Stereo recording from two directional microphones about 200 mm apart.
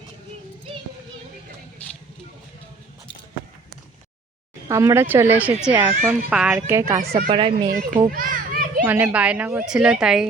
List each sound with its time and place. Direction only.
4.7 s speech: 15° right (ahead or behind)
7.3 s speech: 25° right (ahead or behind)
7.7 s a child's voice: 45° right (ahead or behind)
8.0 s children playing: 45° right (ahead or behind)
8.8 s speech: 10° right (ahead or behind)